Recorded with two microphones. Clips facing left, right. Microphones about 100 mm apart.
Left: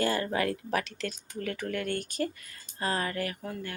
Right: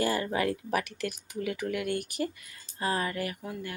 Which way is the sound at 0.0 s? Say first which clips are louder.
Even; 15° right (ahead or behind).